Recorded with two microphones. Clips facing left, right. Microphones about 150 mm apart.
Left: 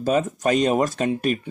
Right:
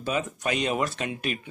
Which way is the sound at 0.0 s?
40° left (ahead or behind).